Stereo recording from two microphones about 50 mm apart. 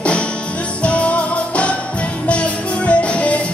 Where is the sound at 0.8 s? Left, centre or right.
Left.